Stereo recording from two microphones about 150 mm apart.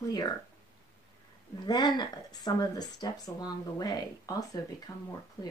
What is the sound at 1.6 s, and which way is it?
Speech, 30° left (ahead or behind).